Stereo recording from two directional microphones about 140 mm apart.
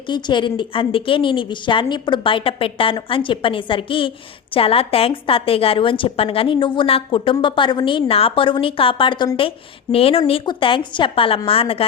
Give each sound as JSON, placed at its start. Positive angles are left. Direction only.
{"t": 0.1, "sound": "a woman's voice", "side_deg": 35}